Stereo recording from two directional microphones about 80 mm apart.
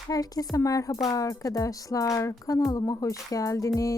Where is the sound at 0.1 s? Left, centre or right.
Left.